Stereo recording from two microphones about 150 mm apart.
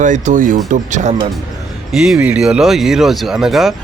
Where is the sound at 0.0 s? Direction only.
55° right (ahead or behind).